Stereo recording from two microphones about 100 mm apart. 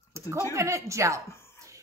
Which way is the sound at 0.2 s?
25° right (ahead or behind).